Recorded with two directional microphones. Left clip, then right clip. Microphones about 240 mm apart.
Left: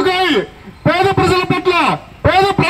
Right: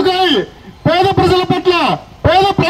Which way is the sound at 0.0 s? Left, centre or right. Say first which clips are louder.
Right 1 dB; right.